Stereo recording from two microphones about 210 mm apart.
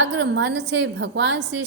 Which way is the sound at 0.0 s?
55° right (ahead or behind).